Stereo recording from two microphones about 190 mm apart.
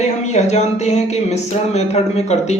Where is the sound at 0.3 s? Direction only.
35° left (ahead or behind).